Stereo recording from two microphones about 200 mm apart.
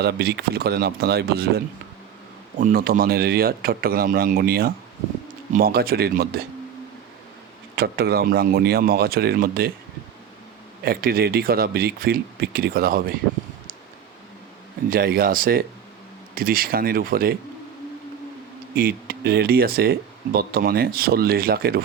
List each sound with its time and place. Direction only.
0.0 s speech: 55° right (ahead or behind)
7.8 s speech: 50° right (ahead or behind)
10.8 s speech: 50° right (ahead or behind)
14.8 s speech: 45° right (ahead or behind)
18.7 s speech: 50° right (ahead or behind)